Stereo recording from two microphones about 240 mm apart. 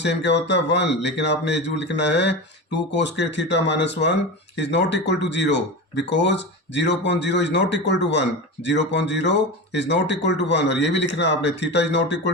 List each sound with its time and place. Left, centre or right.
0.0 s speech: left